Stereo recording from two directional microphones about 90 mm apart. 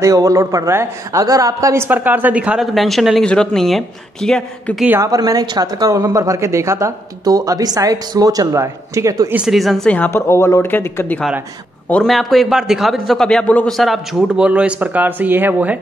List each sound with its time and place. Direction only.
0.0 s speech: 40° right (ahead or behind)
1.9 s a woman's voice: 20° right (ahead or behind)
2.6 s a man's voice: centre (ahead or behind)
5.0 s speech: 40° right (ahead or behind)
9.5 s a man's voice: centre (ahead or behind)
9.8 s speech: 15° left (ahead or behind)
10.1 s speech: 30° left (ahead or behind)
11.9 s a man's voice: 5° left (ahead or behind)
14.2 s speech: 10° right (ahead or behind)